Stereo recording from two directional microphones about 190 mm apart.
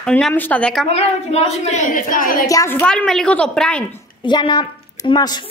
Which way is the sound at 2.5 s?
15° left (ahead or behind).